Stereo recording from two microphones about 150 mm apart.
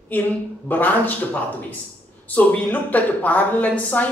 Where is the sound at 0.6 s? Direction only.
10° left (ahead or behind).